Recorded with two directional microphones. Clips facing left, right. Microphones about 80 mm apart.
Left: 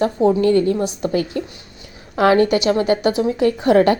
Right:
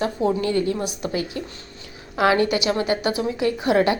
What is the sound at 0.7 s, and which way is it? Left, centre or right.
Speech, left.